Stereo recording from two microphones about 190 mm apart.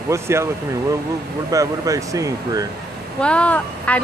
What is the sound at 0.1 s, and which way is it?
Speech, 15° right (ahead or behind).